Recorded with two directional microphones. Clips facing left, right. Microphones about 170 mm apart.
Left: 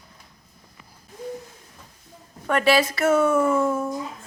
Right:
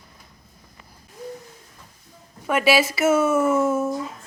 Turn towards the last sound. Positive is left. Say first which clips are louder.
# right 1 dB
turn(degrees=-5)  # may be behind; listen again after turning